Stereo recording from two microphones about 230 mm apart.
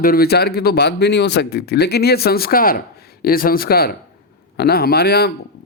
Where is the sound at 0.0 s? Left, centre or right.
Left.